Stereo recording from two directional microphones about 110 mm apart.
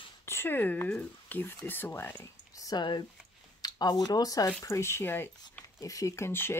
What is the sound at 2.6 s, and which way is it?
Speech, 40° left (ahead or behind).